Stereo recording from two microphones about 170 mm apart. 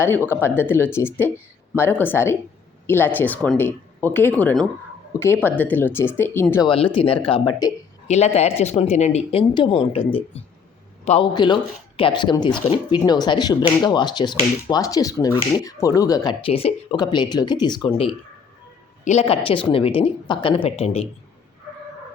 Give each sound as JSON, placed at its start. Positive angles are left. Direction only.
{"t": 0.3, "sound": "speech", "side_deg": 15}
{"t": 6.7, "sound": "speech", "side_deg": 30}
{"t": 8.0, "sound": "a man's voice", "side_deg": 40}
{"t": 11.3, "sound": "speech", "side_deg": 25}
{"t": 16.5, "sound": "speech", "side_deg": 35}